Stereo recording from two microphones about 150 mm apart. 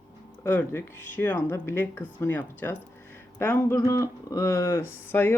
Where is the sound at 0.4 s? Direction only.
15° left (ahead or behind).